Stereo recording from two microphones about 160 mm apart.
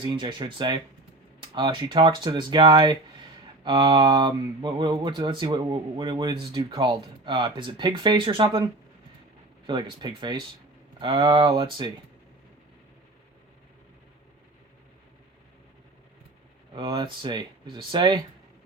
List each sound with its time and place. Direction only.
0.0 s speech: 30° right (ahead or behind)
16.7 s speech: 25° right (ahead or behind)